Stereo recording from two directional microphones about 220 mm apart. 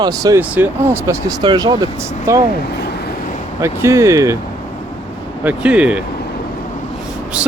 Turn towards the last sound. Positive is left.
turn(degrees=-5)  # may be behind; listen again after turning